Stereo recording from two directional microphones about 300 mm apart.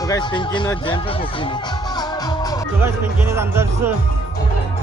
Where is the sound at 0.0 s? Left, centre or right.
Centre.